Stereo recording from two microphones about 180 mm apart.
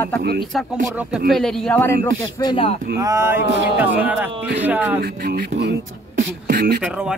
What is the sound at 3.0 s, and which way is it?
Speech, 15° right (ahead or behind).